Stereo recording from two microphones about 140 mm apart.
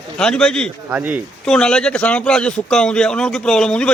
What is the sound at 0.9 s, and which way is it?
Speech, 10° right (ahead or behind).